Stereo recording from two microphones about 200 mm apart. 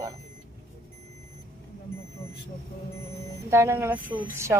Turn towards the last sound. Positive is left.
turn(degrees=-15)  # may be behind; listen again after turning